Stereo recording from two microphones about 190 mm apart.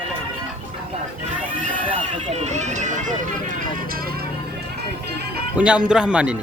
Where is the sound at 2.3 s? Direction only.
35° right (ahead or behind).